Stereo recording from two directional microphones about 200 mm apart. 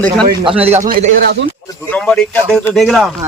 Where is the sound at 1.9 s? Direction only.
5° left (ahead or behind).